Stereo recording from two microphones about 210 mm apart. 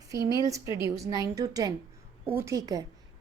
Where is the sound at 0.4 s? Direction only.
15° right (ahead or behind).